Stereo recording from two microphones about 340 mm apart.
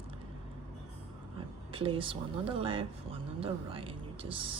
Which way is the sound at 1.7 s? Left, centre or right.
Centre.